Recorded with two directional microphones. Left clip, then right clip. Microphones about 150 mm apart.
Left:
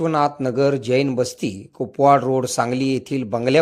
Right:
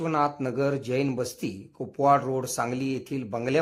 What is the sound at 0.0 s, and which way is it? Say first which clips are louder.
A man's voice: left 7 dB; 30° left (ahead or behind).